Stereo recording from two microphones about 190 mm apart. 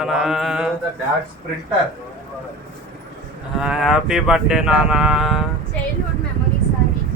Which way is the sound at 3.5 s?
5° right (ahead or behind).